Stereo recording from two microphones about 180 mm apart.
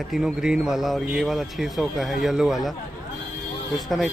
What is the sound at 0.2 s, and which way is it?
Speech, 5° right (ahead or behind).